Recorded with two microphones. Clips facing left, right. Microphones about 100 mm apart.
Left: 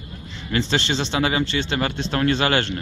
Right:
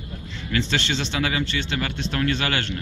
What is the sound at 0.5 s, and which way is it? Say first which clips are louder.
Speech: left 2 dB; 30° left (ahead or behind).